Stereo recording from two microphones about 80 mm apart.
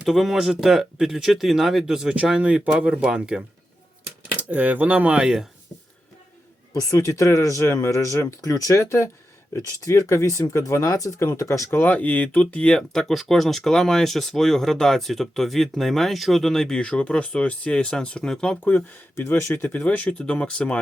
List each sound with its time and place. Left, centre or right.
0.0 s speech: centre
6.7 s speech: left
11.7 s speech: left; by 18.6 s centre
18.6 s speech: left
19.6 s speech: left